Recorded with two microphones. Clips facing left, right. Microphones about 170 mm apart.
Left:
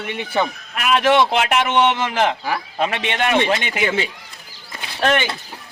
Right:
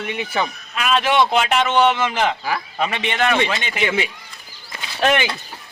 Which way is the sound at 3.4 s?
40° left (ahead or behind).